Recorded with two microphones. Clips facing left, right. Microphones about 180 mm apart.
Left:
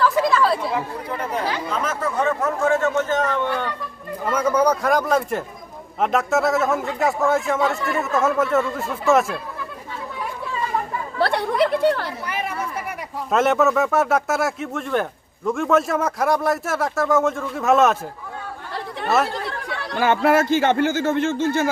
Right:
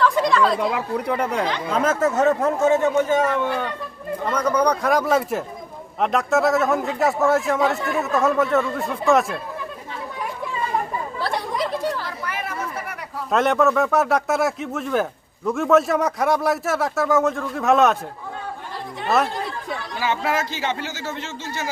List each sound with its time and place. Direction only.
0.0 s chatter: 5° left (ahead or behind)
1.0 s speech: 75° right (ahead or behind)
1.9 s speech: 45° right (ahead or behind)
2.5 s a man's voice: 20° right (ahead or behind)
4.3 s speech: 5° left (ahead or behind)
11.2 s chatter: 65° left (ahead or behind)
12.2 s chatter: 15° left (ahead or behind)
13.3 s speech: centre (ahead or behind)
19.3 s speech: 65° left (ahead or behind); by 21.7 s 50° left (ahead or behind)